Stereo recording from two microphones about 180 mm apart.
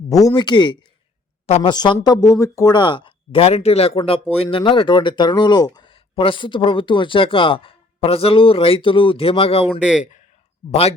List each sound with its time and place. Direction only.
0.1 s speech: 20° left (ahead or behind)
1.5 s a woman's voice: 35° left (ahead or behind)
1.7 s speech: 25° left (ahead or behind)
10.0 s a man's voice: 45° left (ahead or behind)